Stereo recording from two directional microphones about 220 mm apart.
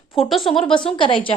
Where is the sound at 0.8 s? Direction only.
20° left (ahead or behind).